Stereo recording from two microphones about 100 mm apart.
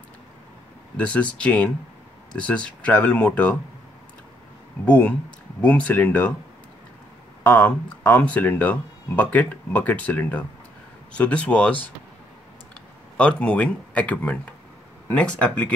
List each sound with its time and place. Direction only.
0.9 s speech: 10° left (ahead or behind)
4.8 s speech: 15° left (ahead or behind)
7.4 s speech: 15° left (ahead or behind)
13.2 s speech: 10° left (ahead or behind)